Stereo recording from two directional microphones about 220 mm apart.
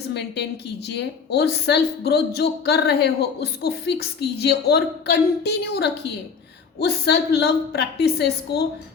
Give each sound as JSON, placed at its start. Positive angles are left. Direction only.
{"t": 0.1, "sound": "a woman's voice", "side_deg": 50}